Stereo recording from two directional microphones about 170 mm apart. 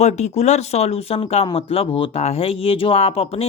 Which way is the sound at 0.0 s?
40° left (ahead or behind).